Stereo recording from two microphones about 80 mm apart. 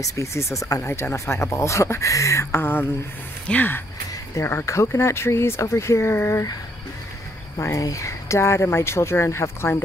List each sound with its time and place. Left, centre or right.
0.0 s speech: left
2.5 s a sound: left
4.4 s speech: left
7.5 s speech: left